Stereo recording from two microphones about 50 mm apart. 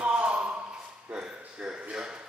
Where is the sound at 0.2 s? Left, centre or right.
Right.